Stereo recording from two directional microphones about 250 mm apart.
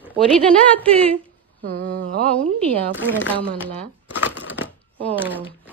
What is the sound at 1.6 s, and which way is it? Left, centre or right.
Speech, right.